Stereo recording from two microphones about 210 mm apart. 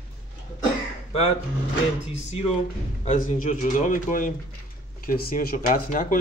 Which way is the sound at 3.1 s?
40° left (ahead or behind).